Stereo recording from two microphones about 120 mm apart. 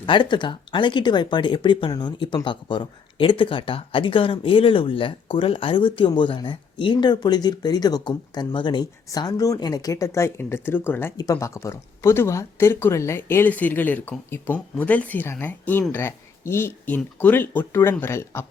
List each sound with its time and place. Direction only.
0.0 s speech: 40° left (ahead or behind); by 11.1 s 15° left (ahead or behind)
11.2 s speech: 30° left (ahead or behind)